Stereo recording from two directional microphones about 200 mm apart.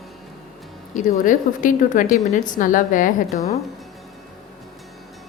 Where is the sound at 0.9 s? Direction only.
40° left (ahead or behind).